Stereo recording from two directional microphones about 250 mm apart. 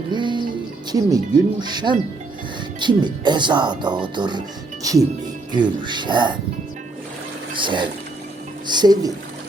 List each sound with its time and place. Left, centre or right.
0.1 s music: centre
0.9 s speech: centre
7.5 s speech: centre